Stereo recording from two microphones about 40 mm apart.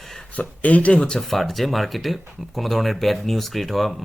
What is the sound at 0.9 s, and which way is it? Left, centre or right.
Speech, left.